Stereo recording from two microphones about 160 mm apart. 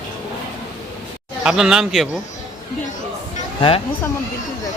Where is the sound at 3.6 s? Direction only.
35° left (ahead or behind).